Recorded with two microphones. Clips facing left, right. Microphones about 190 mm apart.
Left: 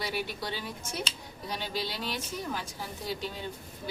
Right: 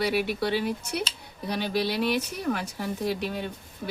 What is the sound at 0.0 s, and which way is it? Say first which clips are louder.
Speech: right 9 dB; 65° right (ahead or behind).